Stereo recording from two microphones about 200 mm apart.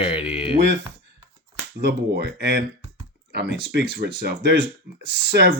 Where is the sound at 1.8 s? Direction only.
55° right (ahead or behind).